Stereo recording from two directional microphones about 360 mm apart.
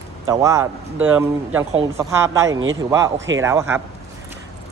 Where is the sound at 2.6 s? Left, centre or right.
Right.